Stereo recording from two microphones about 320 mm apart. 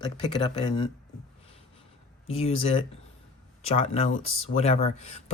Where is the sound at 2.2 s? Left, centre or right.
Centre.